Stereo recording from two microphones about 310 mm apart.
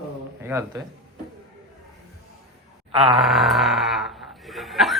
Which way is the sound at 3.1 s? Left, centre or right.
Centre.